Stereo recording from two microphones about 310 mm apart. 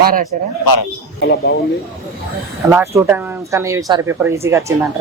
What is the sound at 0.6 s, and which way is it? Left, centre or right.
Speech, left.